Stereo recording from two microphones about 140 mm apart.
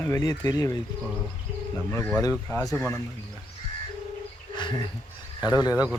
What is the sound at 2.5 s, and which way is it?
Speech, 20° left (ahead or behind).